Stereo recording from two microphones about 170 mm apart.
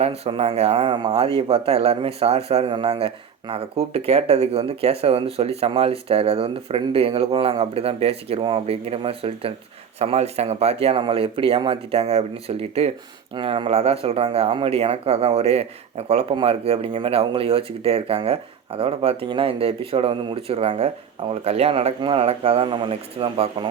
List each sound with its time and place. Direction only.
0.0 s speech: 35° right (ahead or behind)